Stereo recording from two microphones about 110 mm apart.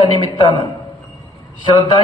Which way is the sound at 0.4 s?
45° left (ahead or behind).